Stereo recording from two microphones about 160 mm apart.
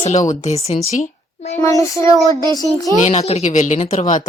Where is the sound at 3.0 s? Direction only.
45° left (ahead or behind).